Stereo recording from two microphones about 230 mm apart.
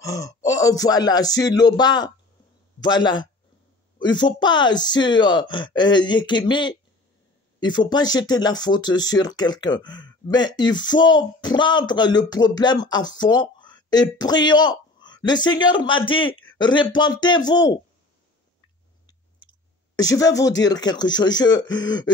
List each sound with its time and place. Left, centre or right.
0.0 s speech: centre
20.0 s speech: centre